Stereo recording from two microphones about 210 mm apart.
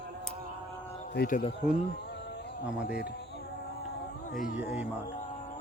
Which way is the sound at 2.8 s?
50° left (ahead or behind).